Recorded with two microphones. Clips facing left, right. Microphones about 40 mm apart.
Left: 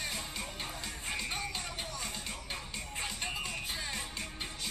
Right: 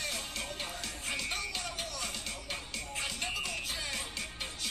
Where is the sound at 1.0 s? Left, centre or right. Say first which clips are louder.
Right 1 dB; centre.